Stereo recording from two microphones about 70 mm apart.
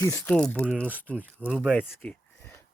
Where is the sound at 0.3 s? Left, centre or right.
Centre.